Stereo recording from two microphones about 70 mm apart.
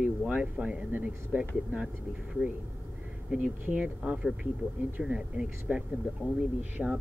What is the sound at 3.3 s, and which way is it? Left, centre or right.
Speech, centre.